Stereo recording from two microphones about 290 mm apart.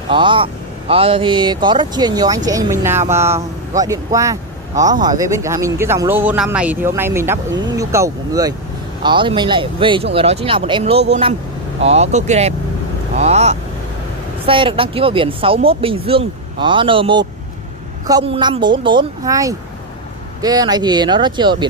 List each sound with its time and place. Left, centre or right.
0.1 s speech: centre